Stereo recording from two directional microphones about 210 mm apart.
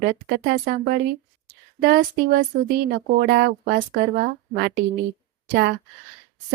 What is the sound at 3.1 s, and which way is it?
Speech, 45° right (ahead or behind).